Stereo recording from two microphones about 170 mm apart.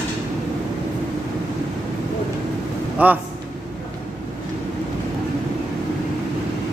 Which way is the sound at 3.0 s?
10° right (ahead or behind).